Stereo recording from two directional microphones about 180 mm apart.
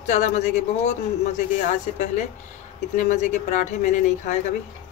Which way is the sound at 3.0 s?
40° left (ahead or behind).